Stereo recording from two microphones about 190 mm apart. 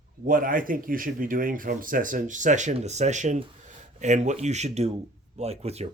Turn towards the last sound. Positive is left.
turn(degrees=-35)  # may be behind; listen again after turning